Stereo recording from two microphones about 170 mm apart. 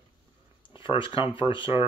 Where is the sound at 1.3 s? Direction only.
30° left (ahead or behind).